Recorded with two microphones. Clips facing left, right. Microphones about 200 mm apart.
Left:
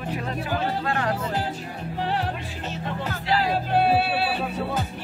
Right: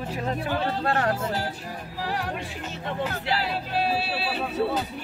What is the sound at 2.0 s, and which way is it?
Music, 25° left (ahead or behind).